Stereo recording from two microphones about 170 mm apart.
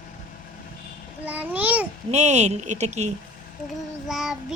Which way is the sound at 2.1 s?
40° right (ahead or behind).